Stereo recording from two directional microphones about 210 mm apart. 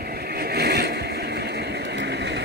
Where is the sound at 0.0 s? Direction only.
50° right (ahead or behind).